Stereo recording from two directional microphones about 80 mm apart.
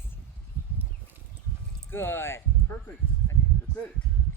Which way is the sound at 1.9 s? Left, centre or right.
Left.